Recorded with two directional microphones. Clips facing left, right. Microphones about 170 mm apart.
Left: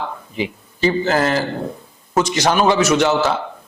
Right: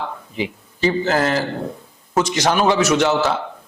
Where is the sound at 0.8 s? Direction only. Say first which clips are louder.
Left 1 dB; 15° left (ahead or behind).